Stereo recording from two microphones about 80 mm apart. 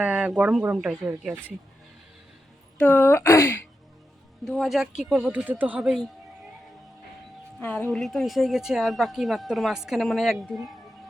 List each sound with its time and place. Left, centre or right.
0.0 s speech: centre
2.7 s speech: left
4.4 s a woman's voice: centre
5.3 s speech: centre
5.8 s a woman's voice: centre
7.9 s a woman's voice: centre